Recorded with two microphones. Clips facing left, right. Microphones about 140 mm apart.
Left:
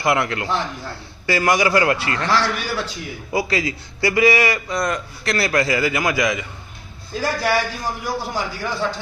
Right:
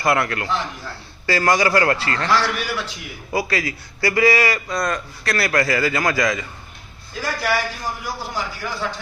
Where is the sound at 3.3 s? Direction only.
20° left (ahead or behind).